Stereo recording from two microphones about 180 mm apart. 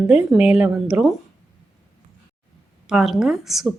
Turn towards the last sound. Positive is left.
turn(degrees=0)  # may be behind; listen again after turning